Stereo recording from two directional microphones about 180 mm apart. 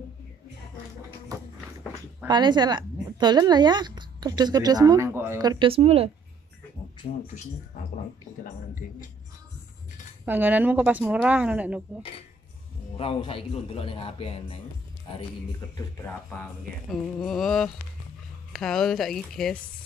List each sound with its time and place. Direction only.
2.2 s a woman's voice: 25° right (ahead or behind)
10.2 s a woman's voice: 10° right (ahead or behind)
12.9 s a man's voice: 30° left (ahead or behind)
15.7 s speech: 20° left (ahead or behind)
16.1 s music: 10° left (ahead or behind)
16.9 s speech: centre (ahead or behind)